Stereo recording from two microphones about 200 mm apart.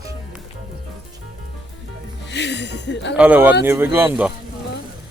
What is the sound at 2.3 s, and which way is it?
Speech, 60° left (ahead or behind).